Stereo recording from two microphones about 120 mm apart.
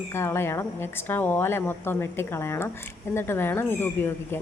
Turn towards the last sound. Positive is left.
turn(degrees=20)  # may be behind; listen again after turning